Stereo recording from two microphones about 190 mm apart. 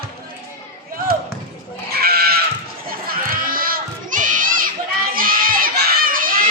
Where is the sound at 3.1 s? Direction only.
50° right (ahead or behind).